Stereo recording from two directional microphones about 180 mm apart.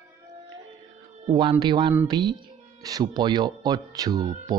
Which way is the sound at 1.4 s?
25° right (ahead or behind).